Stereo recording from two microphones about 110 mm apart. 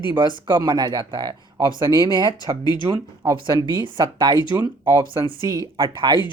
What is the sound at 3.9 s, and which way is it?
Speech, 45° right (ahead or behind).